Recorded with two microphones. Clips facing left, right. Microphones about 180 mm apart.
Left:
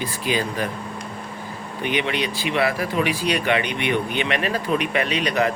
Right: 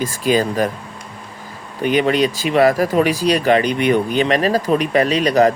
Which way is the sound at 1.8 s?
40° right (ahead or behind).